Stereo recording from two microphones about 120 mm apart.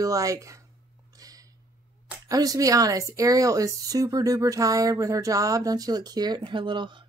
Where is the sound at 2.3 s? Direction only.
30° right (ahead or behind).